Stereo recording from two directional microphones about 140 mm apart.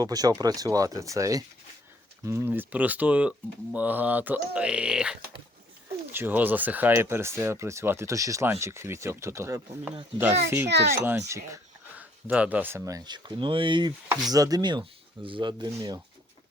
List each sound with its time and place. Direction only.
0.0 s speech: 25° right (ahead or behind)
11.9 s speech: 10° right (ahead or behind); by 16.0 s 30° right (ahead or behind)